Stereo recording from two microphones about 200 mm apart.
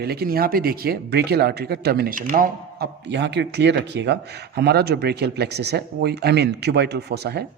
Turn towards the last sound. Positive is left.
turn(degrees=-55)  # may be behind; listen again after turning